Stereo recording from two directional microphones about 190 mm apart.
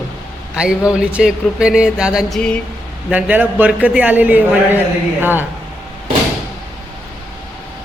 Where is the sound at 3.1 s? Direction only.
10° right (ahead or behind).